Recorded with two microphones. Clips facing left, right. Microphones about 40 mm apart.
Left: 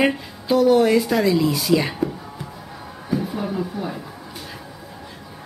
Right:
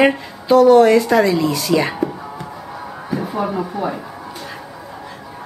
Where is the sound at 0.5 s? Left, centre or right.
Centre.